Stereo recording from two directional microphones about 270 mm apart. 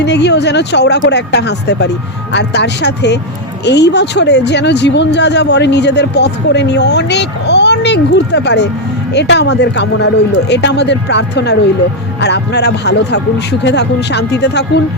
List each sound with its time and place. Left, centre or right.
0.0 s speech: left